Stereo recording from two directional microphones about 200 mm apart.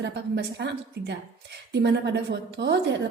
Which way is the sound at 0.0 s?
60° right (ahead or behind).